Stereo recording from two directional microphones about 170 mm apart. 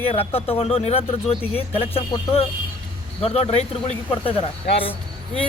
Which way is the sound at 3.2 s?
35° left (ahead or behind).